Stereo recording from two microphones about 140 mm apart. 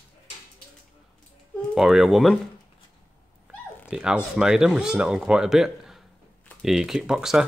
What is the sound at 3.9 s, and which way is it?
Speech, 5° right (ahead or behind).